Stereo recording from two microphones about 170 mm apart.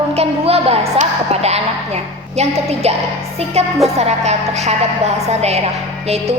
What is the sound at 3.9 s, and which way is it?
A woman's voice, 40° right (ahead or behind).